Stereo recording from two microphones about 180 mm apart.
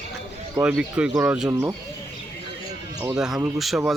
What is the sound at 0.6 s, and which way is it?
Speech, 5° right (ahead or behind).